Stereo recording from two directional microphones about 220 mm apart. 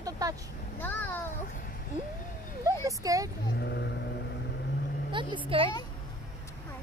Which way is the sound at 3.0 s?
15° right (ahead or behind).